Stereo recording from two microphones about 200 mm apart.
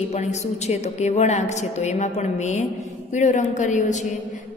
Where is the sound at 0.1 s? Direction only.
35° left (ahead or behind).